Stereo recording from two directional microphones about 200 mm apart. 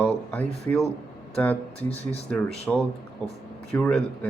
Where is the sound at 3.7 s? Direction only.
10° left (ahead or behind).